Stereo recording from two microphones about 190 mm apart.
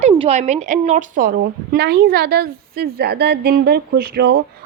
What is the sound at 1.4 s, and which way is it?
A woman's voice, 60° right (ahead or behind).